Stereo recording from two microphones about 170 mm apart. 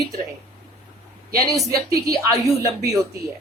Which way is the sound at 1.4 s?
20° right (ahead or behind).